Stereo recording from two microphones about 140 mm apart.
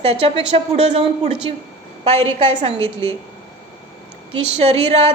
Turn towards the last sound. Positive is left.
turn(degrees=-45)  # may be behind; listen again after turning